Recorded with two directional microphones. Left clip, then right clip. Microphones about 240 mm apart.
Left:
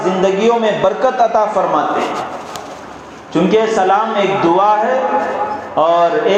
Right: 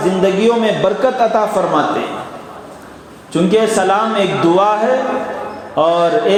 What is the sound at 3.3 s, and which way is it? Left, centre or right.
Speech, right.